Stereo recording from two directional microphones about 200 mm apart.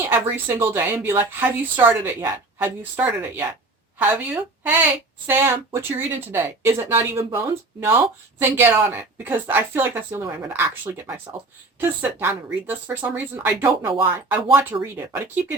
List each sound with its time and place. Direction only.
0.0 s speech: 10° right (ahead or behind)